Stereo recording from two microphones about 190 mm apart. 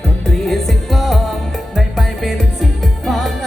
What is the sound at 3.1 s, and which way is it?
Music, centre (ahead or behind).